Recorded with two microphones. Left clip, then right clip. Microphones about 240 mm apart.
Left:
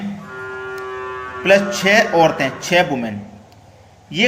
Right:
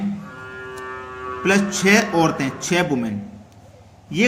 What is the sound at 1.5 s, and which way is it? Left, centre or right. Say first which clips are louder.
Speech: left 4 dB; right.